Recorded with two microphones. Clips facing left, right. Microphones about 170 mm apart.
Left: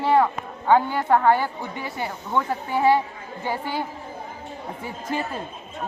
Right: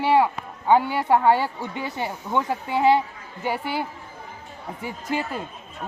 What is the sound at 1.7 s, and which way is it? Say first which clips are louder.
Speech: right 1 dB; 20° right (ahead or behind).